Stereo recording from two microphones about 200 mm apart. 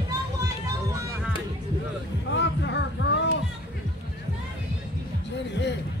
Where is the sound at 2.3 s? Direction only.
65° left (ahead or behind).